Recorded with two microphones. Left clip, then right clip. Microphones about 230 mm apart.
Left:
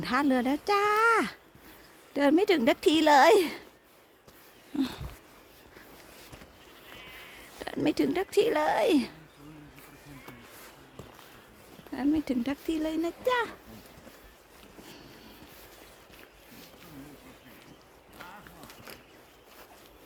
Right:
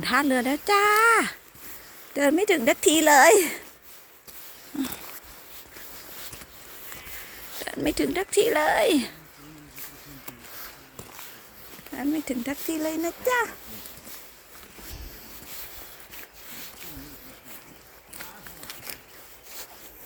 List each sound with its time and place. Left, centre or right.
0.0 s speech: centre
4.7 s a child's voice: centre
7.6 s speech: centre
11.9 s a child's voice: centre